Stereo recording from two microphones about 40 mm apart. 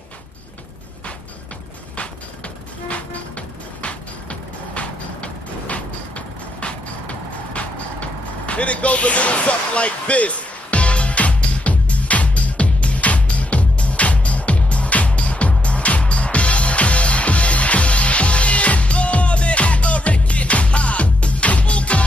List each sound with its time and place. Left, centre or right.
2.0 s music: left